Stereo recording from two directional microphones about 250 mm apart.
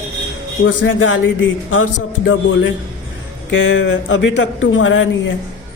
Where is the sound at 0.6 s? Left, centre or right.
Left.